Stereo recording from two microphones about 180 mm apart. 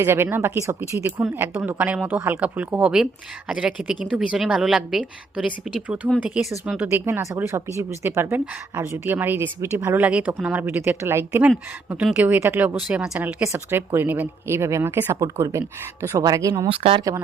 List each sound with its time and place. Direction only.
0.0 s a woman's voice: 10° right (ahead or behind)
16.6 s speech: 30° right (ahead or behind)